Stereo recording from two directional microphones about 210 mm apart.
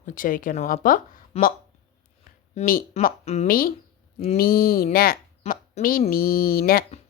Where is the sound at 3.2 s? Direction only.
30° left (ahead or behind).